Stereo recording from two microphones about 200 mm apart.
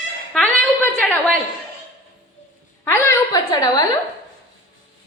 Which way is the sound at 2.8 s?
15° left (ahead or behind).